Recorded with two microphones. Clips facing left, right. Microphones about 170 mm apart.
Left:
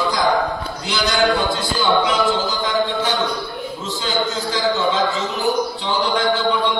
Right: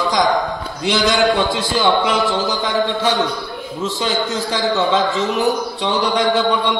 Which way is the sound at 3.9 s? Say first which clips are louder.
Right 2 dB; 65° right (ahead or behind).